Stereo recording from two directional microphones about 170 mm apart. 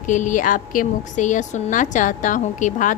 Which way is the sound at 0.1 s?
50° left (ahead or behind).